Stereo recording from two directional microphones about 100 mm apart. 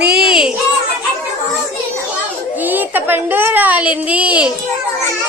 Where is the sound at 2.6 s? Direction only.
20° right (ahead or behind).